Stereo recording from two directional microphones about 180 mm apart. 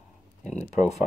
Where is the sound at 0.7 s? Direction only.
40° left (ahead or behind).